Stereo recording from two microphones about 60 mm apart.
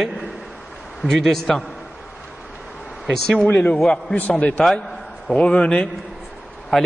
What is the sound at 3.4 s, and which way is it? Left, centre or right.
Speech, left.